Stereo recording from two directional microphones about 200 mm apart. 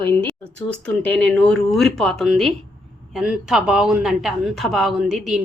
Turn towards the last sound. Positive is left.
turn(degrees=-5)  # may be behind; listen again after turning